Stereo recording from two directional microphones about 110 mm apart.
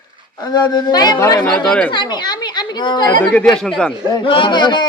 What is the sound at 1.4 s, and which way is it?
Speech, 10° left (ahead or behind).